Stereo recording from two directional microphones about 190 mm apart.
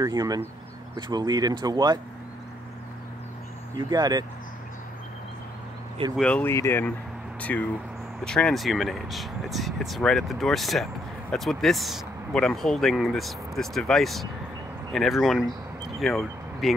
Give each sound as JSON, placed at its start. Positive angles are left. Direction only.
{"t": 0.0, "sound": "speech", "side_deg": -20}
{"t": 3.7, "sound": "speech", "side_deg": -20}
{"t": 6.1, "sound": "speech", "side_deg": 5}